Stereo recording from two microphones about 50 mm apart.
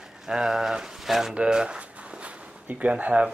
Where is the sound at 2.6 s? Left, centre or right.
Right.